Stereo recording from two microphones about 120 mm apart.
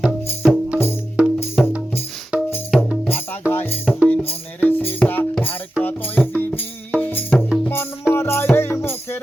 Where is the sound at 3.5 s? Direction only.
15° left (ahead or behind).